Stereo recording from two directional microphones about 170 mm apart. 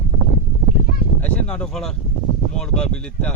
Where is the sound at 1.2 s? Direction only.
5° left (ahead or behind).